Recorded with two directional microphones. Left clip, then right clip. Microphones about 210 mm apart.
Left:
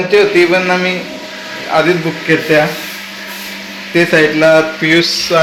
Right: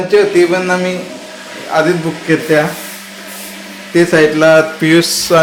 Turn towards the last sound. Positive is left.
turn(degrees=-40)  # may be behind; listen again after turning